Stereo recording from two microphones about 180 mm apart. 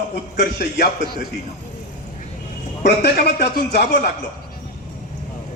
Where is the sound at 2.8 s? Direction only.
65° left (ahead or behind).